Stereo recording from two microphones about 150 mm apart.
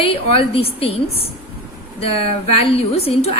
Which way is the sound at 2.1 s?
40° left (ahead or behind).